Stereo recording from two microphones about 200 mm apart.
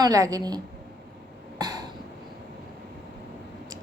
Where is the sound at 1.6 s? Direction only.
20° right (ahead or behind).